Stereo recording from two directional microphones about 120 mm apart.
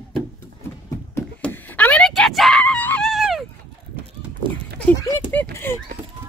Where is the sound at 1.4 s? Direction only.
10° left (ahead or behind).